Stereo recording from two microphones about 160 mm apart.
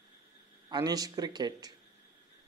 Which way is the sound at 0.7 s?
25° right (ahead or behind).